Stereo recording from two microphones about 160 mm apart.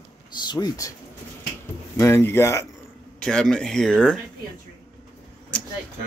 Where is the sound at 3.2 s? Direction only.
5° left (ahead or behind).